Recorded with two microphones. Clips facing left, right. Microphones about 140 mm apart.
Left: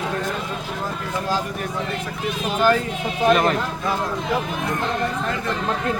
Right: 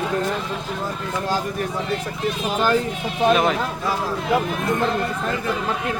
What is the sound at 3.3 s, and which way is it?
Speech, centre (ahead or behind).